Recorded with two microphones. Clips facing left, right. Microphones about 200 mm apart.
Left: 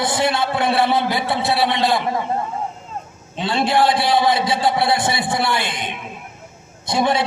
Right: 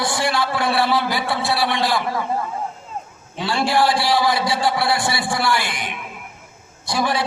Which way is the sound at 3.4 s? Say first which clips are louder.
Left 1 dB; 20° left (ahead or behind).